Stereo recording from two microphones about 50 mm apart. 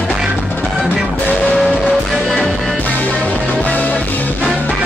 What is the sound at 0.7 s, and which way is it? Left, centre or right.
Music, right.